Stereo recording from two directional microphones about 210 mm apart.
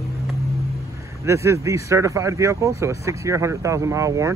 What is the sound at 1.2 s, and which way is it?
Speech, 15° right (ahead or behind).